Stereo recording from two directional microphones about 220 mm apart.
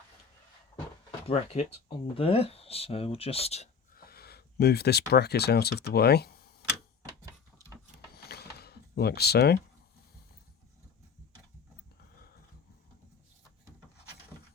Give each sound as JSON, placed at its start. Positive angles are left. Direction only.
{"t": 1.3, "sound": "speech", "side_deg": 25}
{"t": 3.9, "sound": "speech", "side_deg": 45}
{"t": 8.1, "sound": "a sound", "side_deg": 45}